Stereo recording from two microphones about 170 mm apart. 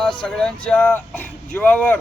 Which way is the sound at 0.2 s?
5° left (ahead or behind).